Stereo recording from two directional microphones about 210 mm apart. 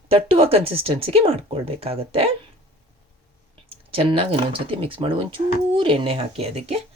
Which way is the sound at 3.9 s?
25° right (ahead or behind).